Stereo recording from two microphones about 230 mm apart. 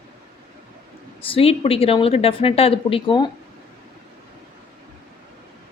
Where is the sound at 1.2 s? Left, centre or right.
Left.